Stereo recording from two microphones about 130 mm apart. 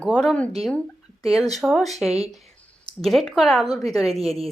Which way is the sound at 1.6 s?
Centre (ahead or behind).